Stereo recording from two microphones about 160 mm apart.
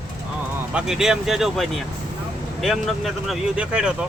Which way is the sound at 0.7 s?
5° right (ahead or behind).